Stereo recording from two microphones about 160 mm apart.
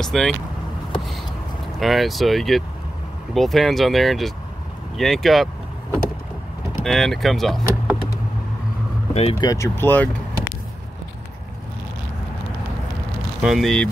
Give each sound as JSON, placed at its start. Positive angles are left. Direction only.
{"t": 0.0, "sound": "speech", "side_deg": 5}
{"t": 1.8, "sound": "speech", "side_deg": 0}
{"t": 6.8, "sound": "speech", "side_deg": 0}
{"t": 9.1, "sound": "speech", "side_deg": 40}
{"t": 9.4, "sound": "speech", "side_deg": 20}
{"t": 13.4, "sound": "speech", "side_deg": 0}